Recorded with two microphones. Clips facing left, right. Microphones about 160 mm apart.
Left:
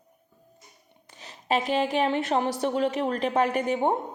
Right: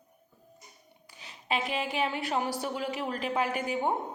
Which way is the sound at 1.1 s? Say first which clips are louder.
Left 6 dB; 40° left (ahead or behind).